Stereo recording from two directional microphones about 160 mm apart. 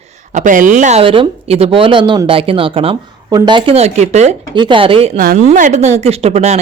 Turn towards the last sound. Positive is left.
turn(degrees=-40)  # may be behind; listen again after turning